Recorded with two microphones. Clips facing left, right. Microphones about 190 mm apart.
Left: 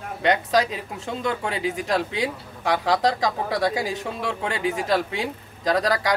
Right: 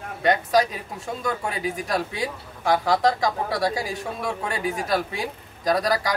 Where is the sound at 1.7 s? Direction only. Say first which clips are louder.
Left 2 dB; 25° left (ahead or behind).